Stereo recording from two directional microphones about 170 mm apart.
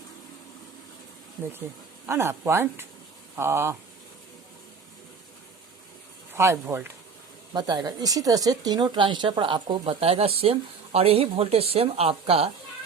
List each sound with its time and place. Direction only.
2.0 s speech: 15° right (ahead or behind)
6.3 s speech: 15° right (ahead or behind); by 12.5 s 35° right (ahead or behind)